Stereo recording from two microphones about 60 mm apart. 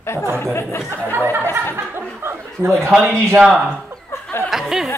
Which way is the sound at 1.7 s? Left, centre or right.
Right.